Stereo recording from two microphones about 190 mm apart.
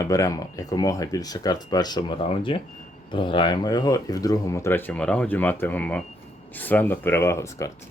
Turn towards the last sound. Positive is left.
turn(degrees=15)  # may be behind; listen again after turning